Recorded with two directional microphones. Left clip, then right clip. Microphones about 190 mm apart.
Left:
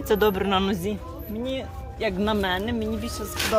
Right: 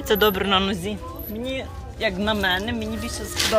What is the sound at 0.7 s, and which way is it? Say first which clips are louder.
Speech: even; 20° left (ahead or behind).